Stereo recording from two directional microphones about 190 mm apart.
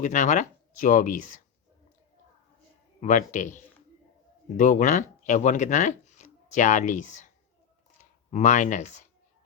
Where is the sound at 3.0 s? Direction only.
40° left (ahead or behind).